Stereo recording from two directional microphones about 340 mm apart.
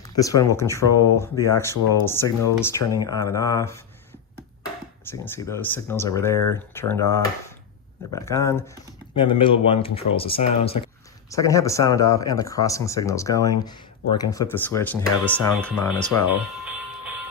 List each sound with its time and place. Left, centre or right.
0.0 s speech: centre
5.0 s speech: centre